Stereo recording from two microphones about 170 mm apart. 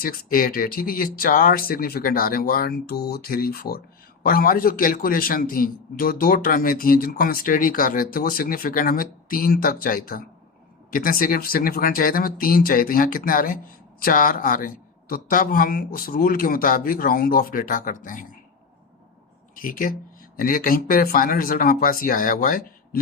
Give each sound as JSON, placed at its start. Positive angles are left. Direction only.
{"t": 0.0, "sound": "a man's voice", "side_deg": 60}
{"t": 19.5, "sound": "a man's voice", "side_deg": 55}